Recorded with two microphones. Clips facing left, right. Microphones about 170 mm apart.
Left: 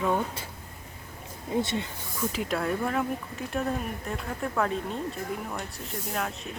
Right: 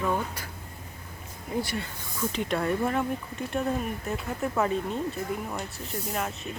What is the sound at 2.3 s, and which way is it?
Speech, centre (ahead or behind).